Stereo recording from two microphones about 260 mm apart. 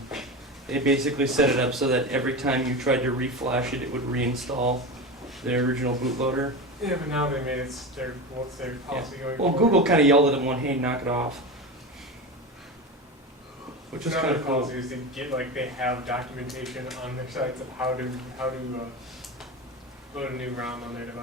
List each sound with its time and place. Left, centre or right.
0.7 s speech: centre
4.5 s speech: right
5.4 s speech: centre
14.0 s speech: centre
20.1 s speech: centre